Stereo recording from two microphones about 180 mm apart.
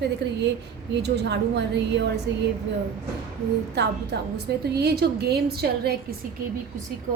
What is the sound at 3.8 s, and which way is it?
A woman's voice, 65° right (ahead or behind).